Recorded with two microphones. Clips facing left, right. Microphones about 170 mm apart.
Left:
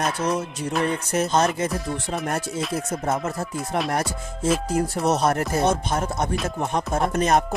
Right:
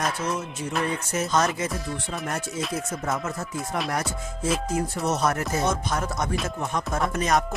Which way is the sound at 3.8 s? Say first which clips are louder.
Left 3 dB; 30° left (ahead or behind).